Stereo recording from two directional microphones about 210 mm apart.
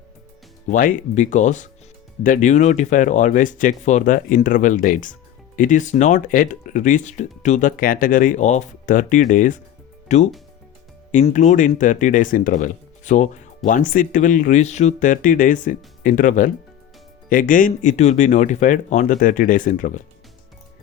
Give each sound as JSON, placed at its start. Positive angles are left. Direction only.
{"t": 0.7, "sound": "speech", "side_deg": 40}